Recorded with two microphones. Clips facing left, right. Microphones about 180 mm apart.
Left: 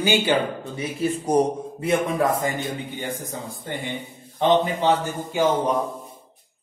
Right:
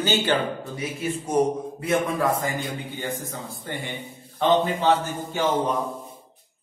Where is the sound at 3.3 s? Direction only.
20° left (ahead or behind).